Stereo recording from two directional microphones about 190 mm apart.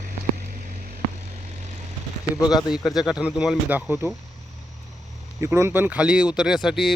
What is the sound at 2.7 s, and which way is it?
Speech, centre (ahead or behind).